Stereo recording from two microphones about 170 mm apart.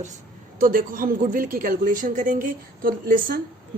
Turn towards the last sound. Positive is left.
turn(degrees=-55)  # may be behind; listen again after turning